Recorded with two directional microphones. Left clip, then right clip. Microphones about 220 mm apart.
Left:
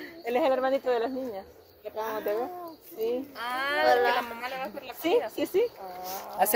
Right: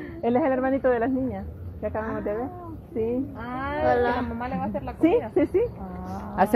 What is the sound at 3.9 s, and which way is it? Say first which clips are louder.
Speech: right 1 dB; 5° left (ahead or behind).